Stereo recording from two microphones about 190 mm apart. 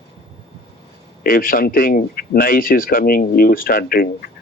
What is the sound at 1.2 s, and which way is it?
A man's voice, 50° left (ahead or behind).